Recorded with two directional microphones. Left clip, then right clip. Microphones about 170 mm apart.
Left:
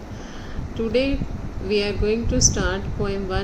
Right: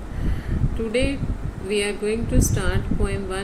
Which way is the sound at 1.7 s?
40° left (ahead or behind).